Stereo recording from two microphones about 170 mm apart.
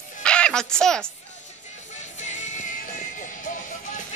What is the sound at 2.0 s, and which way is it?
Music, 45° left (ahead or behind).